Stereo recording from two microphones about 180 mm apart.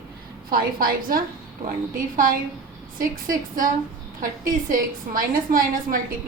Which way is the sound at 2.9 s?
50° right (ahead or behind).